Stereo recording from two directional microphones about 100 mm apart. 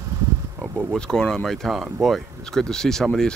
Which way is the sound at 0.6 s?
20° right (ahead or behind).